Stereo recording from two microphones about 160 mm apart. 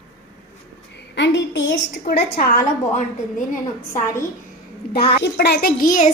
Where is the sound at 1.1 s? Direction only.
90° left.